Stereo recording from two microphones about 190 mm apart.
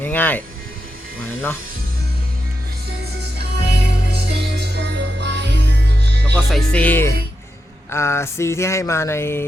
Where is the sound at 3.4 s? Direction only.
60° right (ahead or behind).